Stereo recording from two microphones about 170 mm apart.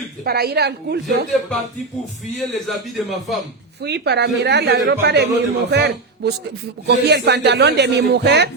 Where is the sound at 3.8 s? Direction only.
80° right.